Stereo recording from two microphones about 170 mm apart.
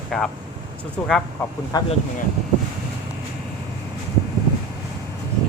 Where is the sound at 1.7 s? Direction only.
25° left (ahead or behind).